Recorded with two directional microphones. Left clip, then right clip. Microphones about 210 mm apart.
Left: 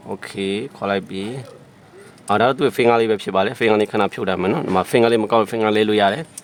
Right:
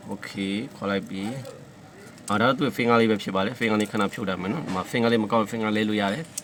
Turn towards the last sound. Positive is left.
turn(degrees=50)  # may be behind; listen again after turning